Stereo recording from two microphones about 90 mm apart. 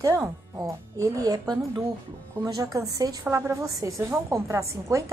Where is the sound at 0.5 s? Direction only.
40° right (ahead or behind).